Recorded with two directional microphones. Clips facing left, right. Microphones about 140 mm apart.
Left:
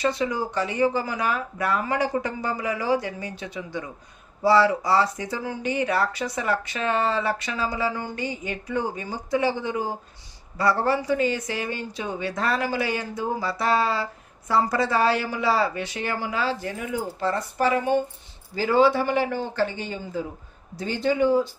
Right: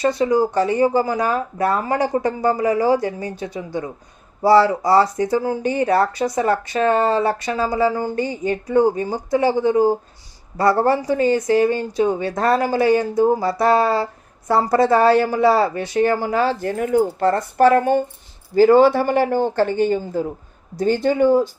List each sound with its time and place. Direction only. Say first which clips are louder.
0.0 s speech: right 8 dB; 40° right (ahead or behind)